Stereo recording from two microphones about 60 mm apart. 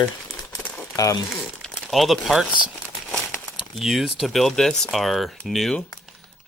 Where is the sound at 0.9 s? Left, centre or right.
Left.